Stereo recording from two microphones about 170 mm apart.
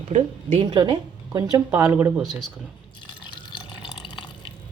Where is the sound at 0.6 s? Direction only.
25° right (ahead or behind).